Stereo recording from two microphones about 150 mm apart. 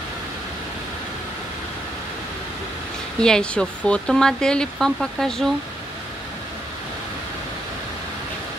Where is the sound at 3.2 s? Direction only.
5° left (ahead or behind).